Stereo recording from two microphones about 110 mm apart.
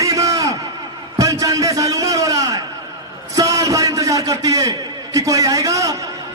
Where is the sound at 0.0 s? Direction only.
30° right (ahead or behind).